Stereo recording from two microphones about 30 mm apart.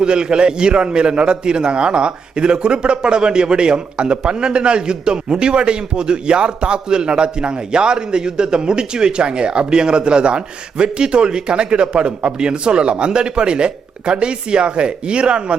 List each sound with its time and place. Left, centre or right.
0.0 s a man's voice: right